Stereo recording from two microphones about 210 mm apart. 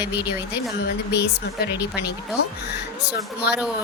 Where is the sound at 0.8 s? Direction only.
50° left (ahead or behind).